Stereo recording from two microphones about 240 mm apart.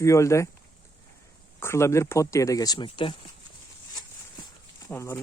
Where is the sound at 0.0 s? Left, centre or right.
Centre.